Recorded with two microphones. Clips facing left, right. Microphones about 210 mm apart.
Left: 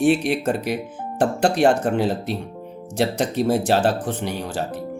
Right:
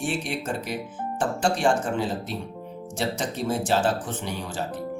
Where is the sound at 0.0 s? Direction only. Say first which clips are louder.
Left 10 dB; 65° left (ahead or behind).